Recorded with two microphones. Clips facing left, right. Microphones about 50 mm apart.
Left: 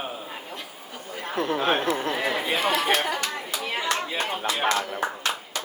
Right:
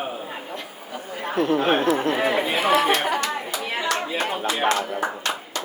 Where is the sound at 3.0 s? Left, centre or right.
Right.